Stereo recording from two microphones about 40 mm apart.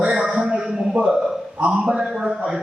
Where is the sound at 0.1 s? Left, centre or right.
Centre.